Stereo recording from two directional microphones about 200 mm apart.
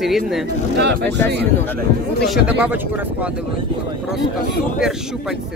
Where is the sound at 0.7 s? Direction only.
60° right (ahead or behind).